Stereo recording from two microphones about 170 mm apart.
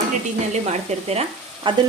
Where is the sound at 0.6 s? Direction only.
40° right (ahead or behind).